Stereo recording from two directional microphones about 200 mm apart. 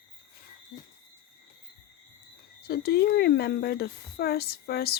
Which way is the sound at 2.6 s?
50° left (ahead or behind).